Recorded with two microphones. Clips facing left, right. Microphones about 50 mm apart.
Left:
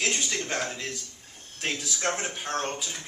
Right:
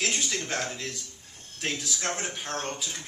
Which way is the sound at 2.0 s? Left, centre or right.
Left.